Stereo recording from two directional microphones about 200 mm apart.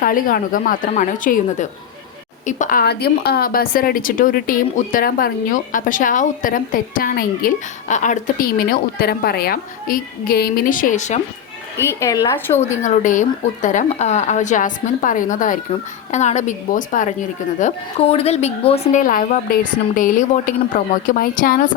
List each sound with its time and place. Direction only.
0.0 s a woman's voice: 45° left (ahead or behind)
11.9 s a woman's voice: 15° left (ahead or behind)
12.7 s a woman's voice: 35° left (ahead or behind)